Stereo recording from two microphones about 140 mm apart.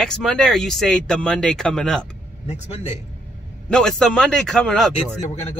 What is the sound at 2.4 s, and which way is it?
Speech, 50° left (ahead or behind).